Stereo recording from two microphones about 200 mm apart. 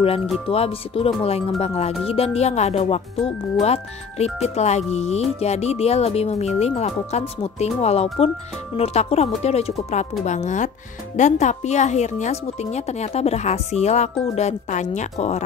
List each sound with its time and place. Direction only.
0.5 s speech: 30° left (ahead or behind)